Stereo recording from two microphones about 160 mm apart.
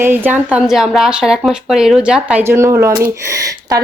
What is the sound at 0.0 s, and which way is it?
A woman's voice, 10° right (ahead or behind).